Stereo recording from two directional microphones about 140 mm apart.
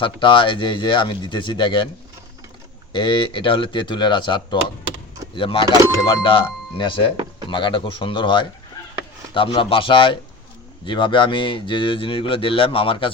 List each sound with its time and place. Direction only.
0.0 s speech: 35° left (ahead or behind)
2.9 s speech: 35° left (ahead or behind)